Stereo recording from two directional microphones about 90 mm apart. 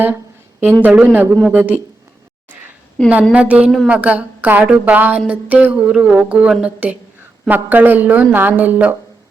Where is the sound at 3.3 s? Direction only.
15° right (ahead or behind).